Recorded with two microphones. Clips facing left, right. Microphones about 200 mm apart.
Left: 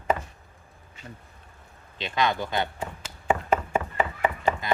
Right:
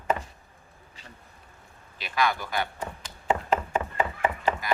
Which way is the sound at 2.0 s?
25° left (ahead or behind).